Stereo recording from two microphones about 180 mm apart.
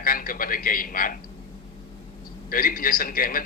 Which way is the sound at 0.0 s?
50° left (ahead or behind).